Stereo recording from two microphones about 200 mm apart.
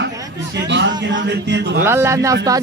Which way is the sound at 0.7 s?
60° right (ahead or behind).